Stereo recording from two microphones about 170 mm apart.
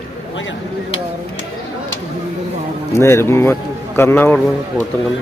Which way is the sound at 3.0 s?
15° left (ahead or behind).